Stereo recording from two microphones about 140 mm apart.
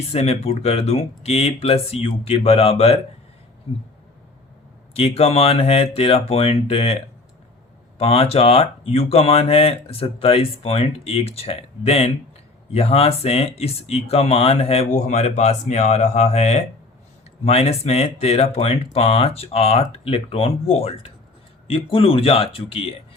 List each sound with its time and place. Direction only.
0.1 s speech: 50° left (ahead or behind)
4.9 s speech: 45° left (ahead or behind)